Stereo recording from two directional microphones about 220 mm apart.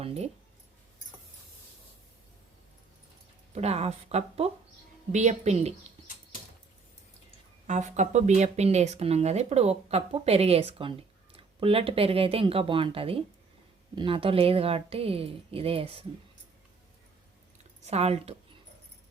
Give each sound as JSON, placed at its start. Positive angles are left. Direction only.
{"t": 0.0, "sound": "speech", "side_deg": -25}
{"t": 3.5, "sound": "a woman's voice", "side_deg": -30}
{"t": 7.7, "sound": "speech", "side_deg": -35}
{"t": 17.8, "sound": "speech", "side_deg": -30}